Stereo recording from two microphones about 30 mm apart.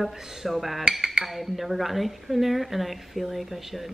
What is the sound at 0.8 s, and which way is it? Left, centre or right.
Speech, centre.